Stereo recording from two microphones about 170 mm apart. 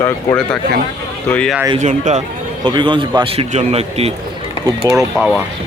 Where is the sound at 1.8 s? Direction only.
45° right (ahead or behind).